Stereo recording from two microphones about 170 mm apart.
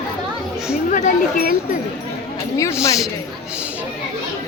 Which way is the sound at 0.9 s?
50° left (ahead or behind).